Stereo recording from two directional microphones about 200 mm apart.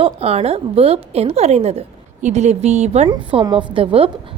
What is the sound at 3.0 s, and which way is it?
A woman's voice, 25° right (ahead or behind).